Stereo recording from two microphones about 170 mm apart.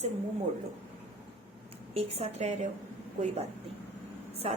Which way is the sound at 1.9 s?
35° right (ahead or behind).